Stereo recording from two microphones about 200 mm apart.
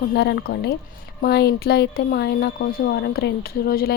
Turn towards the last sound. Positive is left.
turn(degrees=50)  # may be behind; listen again after turning